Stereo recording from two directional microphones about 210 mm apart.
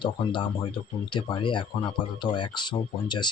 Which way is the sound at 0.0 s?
20° left (ahead or behind).